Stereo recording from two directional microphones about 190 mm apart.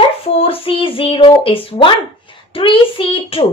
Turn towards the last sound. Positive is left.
turn(degrees=30)  # may be behind; listen again after turning